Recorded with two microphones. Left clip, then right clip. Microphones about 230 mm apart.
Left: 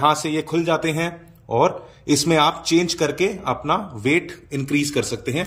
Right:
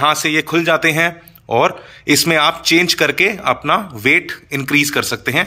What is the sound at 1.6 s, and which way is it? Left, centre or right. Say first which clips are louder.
A man's voice: right 2 dB; centre.